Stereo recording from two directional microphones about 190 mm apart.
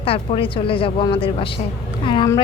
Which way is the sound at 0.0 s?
30° left (ahead or behind).